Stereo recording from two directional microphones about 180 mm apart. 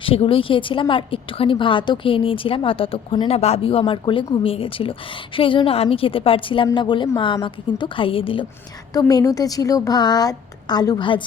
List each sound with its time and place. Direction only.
0.0 s a woman's voice: 30° left (ahead or behind)